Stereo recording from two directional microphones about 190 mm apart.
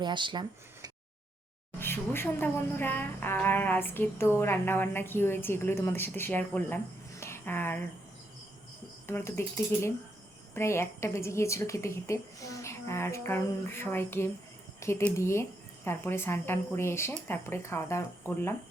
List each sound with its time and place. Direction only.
0.0 s speech: 25° right (ahead or behind)
1.8 s a woman's voice: 10° left (ahead or behind)
7.2 s a sound: 15° left (ahead or behind)
9.0 s a woman's voice: 10° left (ahead or behind)